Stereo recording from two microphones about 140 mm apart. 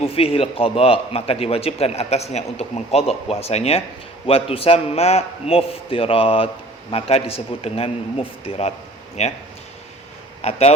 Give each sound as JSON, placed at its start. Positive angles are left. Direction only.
{"t": 0.0, "sound": "a man's voice", "side_deg": 40}
{"t": 10.4, "sound": "a man's voice", "side_deg": 50}